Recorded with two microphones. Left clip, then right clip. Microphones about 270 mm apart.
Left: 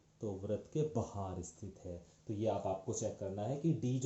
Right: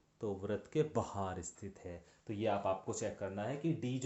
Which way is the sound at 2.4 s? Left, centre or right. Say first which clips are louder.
Right 2 dB; right.